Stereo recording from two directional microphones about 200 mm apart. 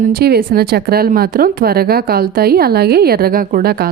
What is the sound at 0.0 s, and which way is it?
Speech, 50° right (ahead or behind).